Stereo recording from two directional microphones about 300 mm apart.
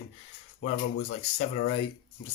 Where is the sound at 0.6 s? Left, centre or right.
Left.